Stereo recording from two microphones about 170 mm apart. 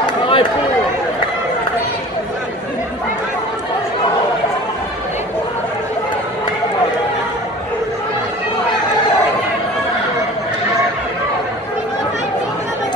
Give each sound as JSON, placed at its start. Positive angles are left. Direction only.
{"t": 0.0, "sound": "chatter", "side_deg": 30}